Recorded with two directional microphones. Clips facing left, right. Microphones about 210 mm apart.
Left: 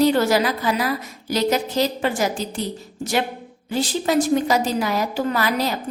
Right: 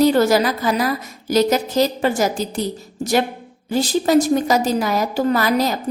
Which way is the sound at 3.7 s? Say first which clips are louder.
Right 5 dB; 40° right (ahead or behind).